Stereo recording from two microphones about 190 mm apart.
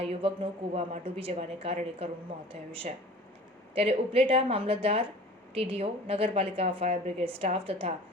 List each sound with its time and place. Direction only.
0.0 s a woman's voice: 30° right (ahead or behind)
3.8 s a woman's voice: 30° right (ahead or behind)